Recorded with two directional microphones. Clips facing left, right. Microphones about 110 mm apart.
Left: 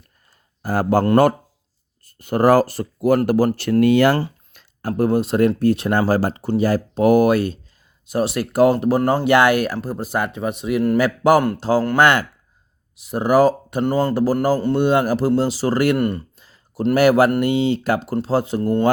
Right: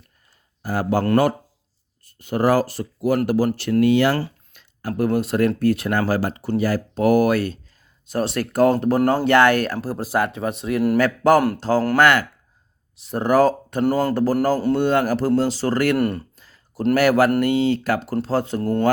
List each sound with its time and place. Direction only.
0.6 s a man's voice: 45° left (ahead or behind)
2.0 s speech: 45° left (ahead or behind)
4.5 s a sound: 40° left (ahead or behind)
4.9 s speech: 30° left (ahead or behind); by 9.7 s 10° left (ahead or behind)
9.8 s a man's voice: centre (ahead or behind); by 12.2 s 20° left (ahead or behind)
13.0 s speech: 5° left (ahead or behind)
13.8 s a man's voice: centre (ahead or behind)
14.1 s speech: 10° left (ahead or behind)
16.0 s a man's voice: centre (ahead or behind)
16.4 s a sound: 20° left (ahead or behind)
16.9 s speech: 20° left (ahead or behind)